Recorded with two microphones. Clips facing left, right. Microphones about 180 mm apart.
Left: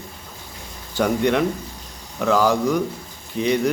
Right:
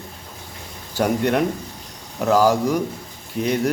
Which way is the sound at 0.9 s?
10° right (ahead or behind).